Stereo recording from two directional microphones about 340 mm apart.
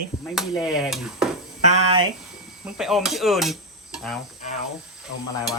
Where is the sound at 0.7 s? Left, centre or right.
Centre.